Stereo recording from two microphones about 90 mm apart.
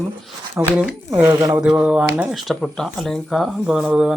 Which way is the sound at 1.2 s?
35° right (ahead or behind).